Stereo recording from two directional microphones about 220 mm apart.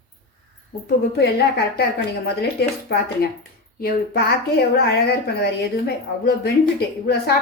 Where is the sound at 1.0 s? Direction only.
45° left (ahead or behind).